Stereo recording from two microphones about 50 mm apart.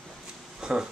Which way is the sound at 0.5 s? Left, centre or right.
Centre.